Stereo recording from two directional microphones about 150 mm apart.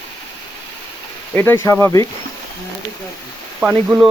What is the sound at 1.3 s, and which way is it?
Speech, 15° left (ahead or behind).